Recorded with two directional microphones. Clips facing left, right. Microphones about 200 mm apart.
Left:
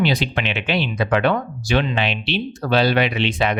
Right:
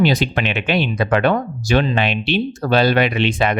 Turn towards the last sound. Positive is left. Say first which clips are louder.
# right 3 dB
turn(degrees=-50)  # may be behind; listen again after turning